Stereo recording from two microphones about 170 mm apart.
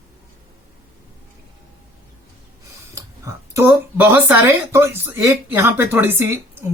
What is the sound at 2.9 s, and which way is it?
Speech, 15° right (ahead or behind).